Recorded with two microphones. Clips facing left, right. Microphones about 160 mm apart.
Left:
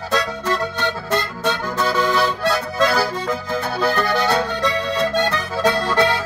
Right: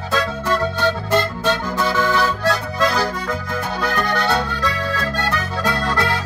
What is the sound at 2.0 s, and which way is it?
Music, 15° left (ahead or behind).